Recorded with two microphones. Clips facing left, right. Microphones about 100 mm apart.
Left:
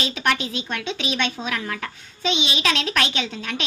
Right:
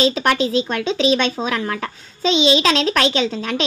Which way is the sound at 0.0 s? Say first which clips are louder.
Right 7 dB; 35° right (ahead or behind).